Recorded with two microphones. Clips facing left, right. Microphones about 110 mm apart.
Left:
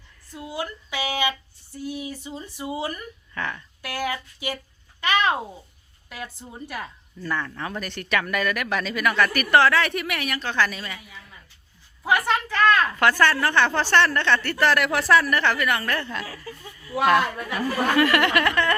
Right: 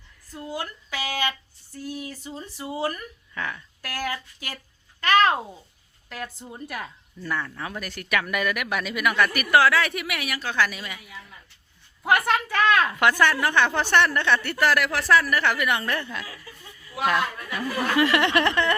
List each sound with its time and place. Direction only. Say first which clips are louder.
0.3 s speech: left 1 dB; 10° left (ahead or behind)
2.9 s speech: left 1 dB; 5° right (ahead or behind)
3.8 s speech: left 2 dB; 15° left (ahead or behind)
4.9 s a sound: right 3 dB; 10° left (ahead or behind)
6.1 s speech: right 1 dB; 10° left (ahead or behind)
6.7 s a woman's voice: left 2 dB; centre (ahead or behind)
12.0 s a woman's voice: even; centre (ahead or behind)
16.2 s chuckle: left 5 dB; 40° left (ahead or behind)
17.9 s a sound: even; 20° right (ahead or behind)